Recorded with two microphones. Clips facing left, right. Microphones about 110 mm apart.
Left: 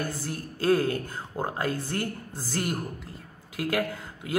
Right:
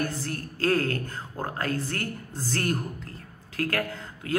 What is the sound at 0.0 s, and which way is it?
Speech, 15° left (ahead or behind).